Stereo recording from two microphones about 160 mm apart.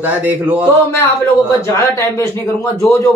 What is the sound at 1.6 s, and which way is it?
A man's voice, 15° left (ahead or behind).